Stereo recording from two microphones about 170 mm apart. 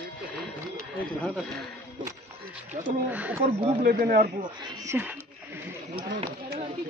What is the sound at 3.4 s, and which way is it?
Speech, 35° right (ahead or behind).